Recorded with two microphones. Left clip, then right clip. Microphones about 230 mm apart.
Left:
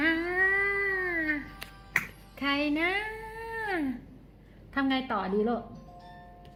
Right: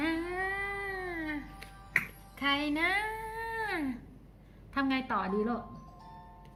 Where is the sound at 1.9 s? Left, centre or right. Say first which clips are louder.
Left 1 dB; centre.